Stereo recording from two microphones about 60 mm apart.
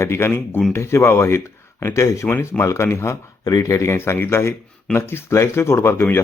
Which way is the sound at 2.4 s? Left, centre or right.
Left.